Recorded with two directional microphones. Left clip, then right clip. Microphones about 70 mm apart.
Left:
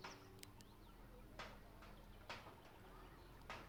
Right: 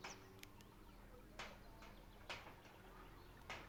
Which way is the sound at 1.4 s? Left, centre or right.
Left.